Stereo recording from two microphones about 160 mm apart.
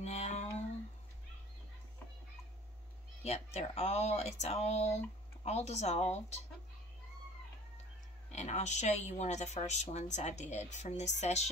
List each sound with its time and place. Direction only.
0.0 s a sound: 45° left (ahead or behind)
3.3 s speech: 40° left (ahead or behind)
8.3 s speech: 45° left (ahead or behind)